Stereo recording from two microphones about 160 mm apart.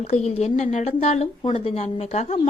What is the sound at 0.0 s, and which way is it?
A woman's voice, 40° left (ahead or behind).